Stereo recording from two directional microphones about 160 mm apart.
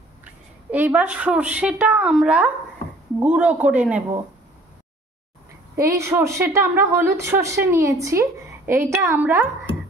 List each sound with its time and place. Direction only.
0.2 s a woman's voice: 10° right (ahead or behind)
5.8 s a woman's voice: 15° right (ahead or behind)